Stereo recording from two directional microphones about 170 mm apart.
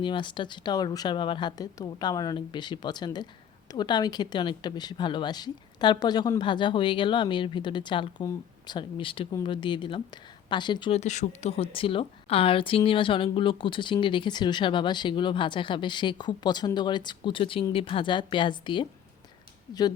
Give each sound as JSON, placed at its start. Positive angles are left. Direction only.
{"t": 0.0, "sound": "a woman's voice", "side_deg": 30}
{"t": 11.0, "sound": "a woman's voice", "side_deg": 45}